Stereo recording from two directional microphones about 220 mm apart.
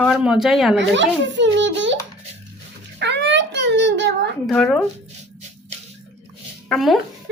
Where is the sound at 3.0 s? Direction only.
50° right (ahead or behind).